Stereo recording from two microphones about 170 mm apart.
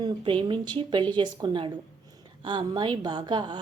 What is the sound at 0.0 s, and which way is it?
A woman's voice, 30° right (ahead or behind).